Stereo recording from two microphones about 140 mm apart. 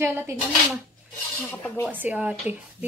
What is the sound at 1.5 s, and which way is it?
Speech, 15° left (ahead or behind).